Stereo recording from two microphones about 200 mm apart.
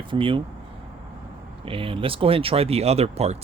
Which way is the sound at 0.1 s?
25° right (ahead or behind).